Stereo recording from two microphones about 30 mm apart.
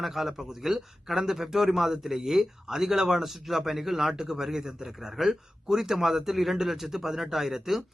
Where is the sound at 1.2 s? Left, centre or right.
Centre.